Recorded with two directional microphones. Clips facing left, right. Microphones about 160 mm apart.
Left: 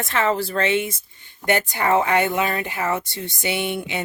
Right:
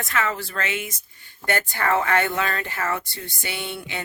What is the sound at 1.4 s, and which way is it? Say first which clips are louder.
Speech: left 4 dB; 15° left (ahead or behind).